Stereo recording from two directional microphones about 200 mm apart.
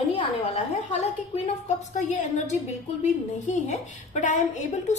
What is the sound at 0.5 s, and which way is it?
A woman's voice, 35° left (ahead or behind).